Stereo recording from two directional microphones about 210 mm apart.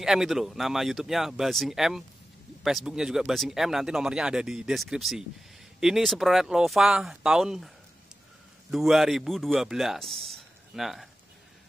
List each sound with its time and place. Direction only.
0.0 s a man's voice: centre (ahead or behind)